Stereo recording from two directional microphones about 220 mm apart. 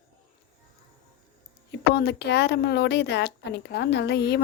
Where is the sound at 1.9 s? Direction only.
50° left (ahead or behind).